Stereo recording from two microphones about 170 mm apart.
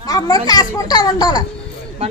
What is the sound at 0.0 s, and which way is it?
A child's voice, 20° left (ahead or behind).